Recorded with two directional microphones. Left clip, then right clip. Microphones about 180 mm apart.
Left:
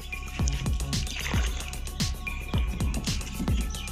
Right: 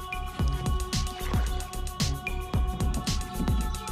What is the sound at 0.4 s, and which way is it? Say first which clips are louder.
Music: right 1 dB; centre (ahead or behind).